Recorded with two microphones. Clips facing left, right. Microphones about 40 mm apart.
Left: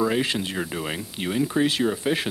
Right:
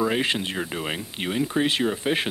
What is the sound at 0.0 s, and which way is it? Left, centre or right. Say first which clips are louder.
Speech: even; right.